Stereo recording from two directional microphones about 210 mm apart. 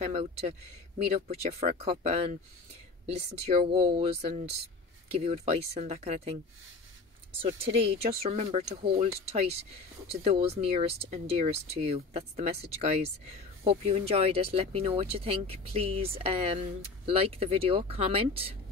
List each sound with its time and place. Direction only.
0.0 s speech: 30° right (ahead or behind)
3.7 s speech: 25° right (ahead or behind)
7.4 s speech: 30° right (ahead or behind)